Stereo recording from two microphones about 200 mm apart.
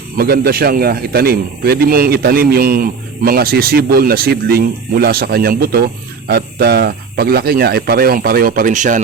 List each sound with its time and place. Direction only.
0.2 s speech: 50° right (ahead or behind)